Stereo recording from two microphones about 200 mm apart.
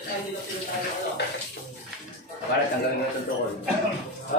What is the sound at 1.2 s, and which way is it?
Bathtub, 55° left (ahead or behind).